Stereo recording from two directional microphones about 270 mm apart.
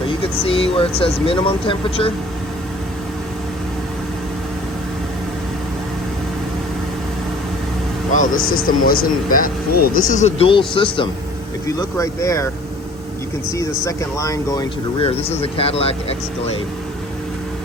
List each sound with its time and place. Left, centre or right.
0.2 s speech: centre
8.1 s speech: left; by 12.5 s centre
13.5 s speech: centre